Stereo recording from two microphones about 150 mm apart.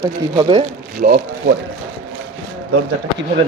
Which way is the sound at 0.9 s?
90° right.